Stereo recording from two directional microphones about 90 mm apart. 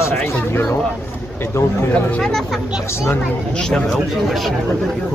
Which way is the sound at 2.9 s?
30° left (ahead or behind).